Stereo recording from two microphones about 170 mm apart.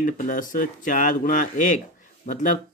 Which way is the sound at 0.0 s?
50° left (ahead or behind).